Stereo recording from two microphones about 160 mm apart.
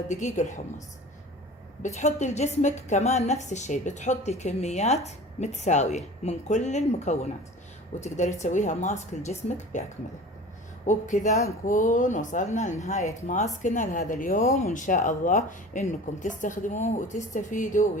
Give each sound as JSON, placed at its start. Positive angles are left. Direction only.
{"t": 0.1, "sound": "a woman's voice", "side_deg": 50}
{"t": 1.8, "sound": "a woman's voice", "side_deg": 45}
{"t": 10.8, "sound": "a woman's voice", "side_deg": 50}